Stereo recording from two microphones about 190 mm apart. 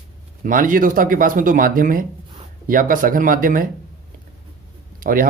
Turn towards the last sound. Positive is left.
turn(degrees=-45)  # may be behind; listen again after turning